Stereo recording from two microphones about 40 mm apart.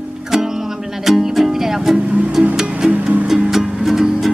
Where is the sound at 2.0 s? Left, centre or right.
Right.